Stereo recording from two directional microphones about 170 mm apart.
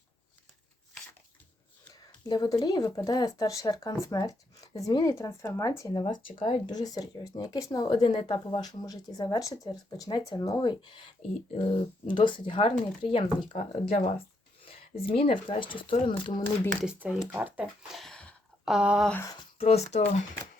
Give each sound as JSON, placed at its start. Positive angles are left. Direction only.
{"t": 2.2, "sound": "speech", "side_deg": 25}
{"t": 13.6, "sound": "speech", "side_deg": 50}
{"t": 14.2, "sound": "speech", "side_deg": 35}
{"t": 16.8, "sound": "speech", "side_deg": -5}
{"t": 18.0, "sound": "a sound", "side_deg": 5}
{"t": 18.7, "sound": "speech", "side_deg": -5}
{"t": 19.2, "sound": "speech", "side_deg": 20}
{"t": 19.5, "sound": "speech", "side_deg": 40}